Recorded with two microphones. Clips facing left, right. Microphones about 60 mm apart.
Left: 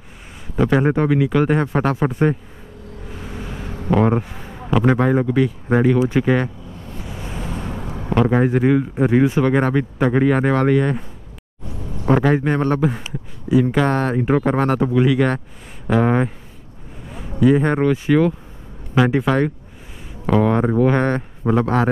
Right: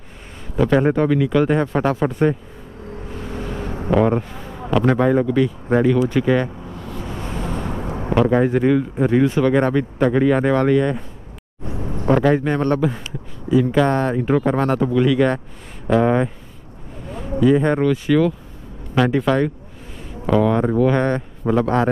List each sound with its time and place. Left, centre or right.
0.6 s speech: centre
3.2 s vehicle: centre
4.0 s speech: centre
7.0 s vehicle: right
7.6 s a sound: right
8.3 s speech: centre
11.6 s a sound: right
12.1 s speech: centre
17.4 s speech: centre
21.5 s speech: centre